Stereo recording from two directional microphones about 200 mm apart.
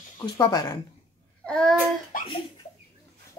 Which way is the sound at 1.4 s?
5° left (ahead or behind).